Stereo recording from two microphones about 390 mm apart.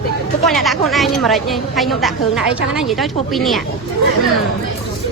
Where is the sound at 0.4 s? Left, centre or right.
Centre.